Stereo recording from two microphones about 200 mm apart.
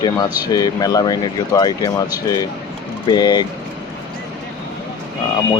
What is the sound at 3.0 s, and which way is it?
Speech, 20° left (ahead or behind).